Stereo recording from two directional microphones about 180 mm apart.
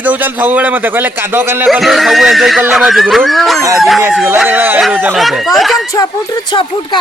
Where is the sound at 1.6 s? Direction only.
Centre (ahead or behind).